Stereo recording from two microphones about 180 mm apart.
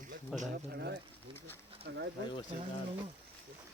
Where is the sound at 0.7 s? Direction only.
65° right (ahead or behind).